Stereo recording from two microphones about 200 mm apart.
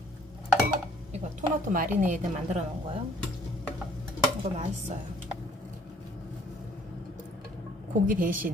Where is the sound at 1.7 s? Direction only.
40° right (ahead or behind).